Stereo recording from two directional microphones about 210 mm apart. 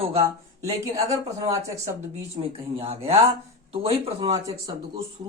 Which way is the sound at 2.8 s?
30° right (ahead or behind).